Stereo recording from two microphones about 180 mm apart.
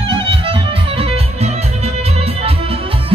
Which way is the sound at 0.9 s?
35° right (ahead or behind).